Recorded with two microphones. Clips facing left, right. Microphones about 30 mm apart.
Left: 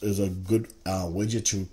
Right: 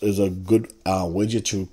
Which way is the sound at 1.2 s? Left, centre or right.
Right.